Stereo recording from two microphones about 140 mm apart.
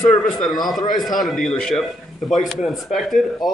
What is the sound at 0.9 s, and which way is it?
Speech, centre (ahead or behind).